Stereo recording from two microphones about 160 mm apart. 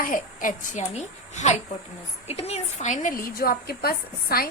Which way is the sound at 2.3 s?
40° left (ahead or behind).